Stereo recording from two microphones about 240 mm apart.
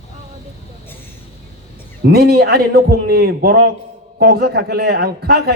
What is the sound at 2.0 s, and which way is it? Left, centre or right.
A man's voice, right.